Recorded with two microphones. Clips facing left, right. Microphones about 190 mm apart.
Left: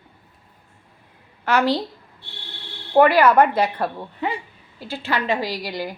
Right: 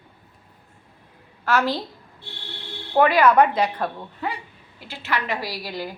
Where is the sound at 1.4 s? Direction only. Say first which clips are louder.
Left 3 dB; 15° left (ahead or behind).